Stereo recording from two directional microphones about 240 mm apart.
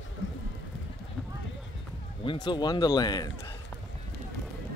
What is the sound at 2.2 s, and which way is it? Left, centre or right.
Speech, centre.